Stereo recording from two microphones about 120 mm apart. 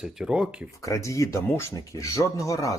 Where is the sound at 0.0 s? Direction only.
5° right (ahead or behind).